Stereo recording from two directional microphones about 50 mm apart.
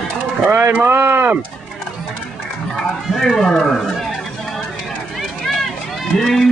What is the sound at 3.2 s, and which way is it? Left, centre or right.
Speech, centre.